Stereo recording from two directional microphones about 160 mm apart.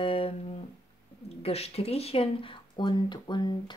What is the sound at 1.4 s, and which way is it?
Speech, 40° left (ahead or behind).